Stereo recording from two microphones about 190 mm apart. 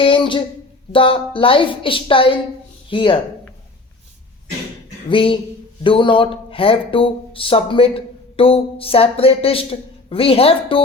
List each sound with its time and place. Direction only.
0.0 s speech: 25° left (ahead or behind)
5.0 s speech: 25° left (ahead or behind)